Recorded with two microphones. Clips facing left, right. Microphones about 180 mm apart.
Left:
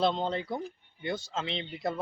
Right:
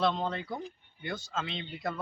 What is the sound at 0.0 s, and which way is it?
Speech, 30° left (ahead or behind).